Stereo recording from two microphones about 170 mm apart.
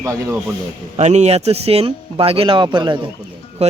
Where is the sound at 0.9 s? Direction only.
40° right (ahead or behind).